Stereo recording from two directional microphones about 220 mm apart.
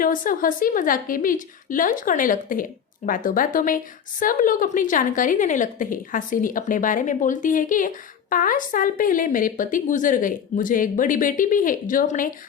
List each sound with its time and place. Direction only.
0.0 s a woman's voice: 40° left (ahead or behind)